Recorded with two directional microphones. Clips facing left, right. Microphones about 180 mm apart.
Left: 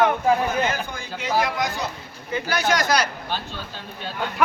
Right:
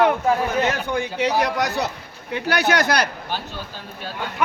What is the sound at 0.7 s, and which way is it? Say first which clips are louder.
A man's voice: right 5 dB; 70° right (ahead or behind).